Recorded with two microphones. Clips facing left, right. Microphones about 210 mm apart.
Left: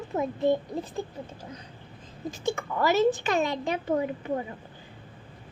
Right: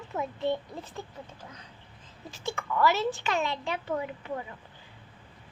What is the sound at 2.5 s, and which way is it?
A child's voice, 40° left (ahead or behind).